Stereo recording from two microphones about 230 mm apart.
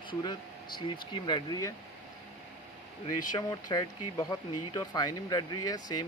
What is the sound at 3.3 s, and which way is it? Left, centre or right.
Speech, centre.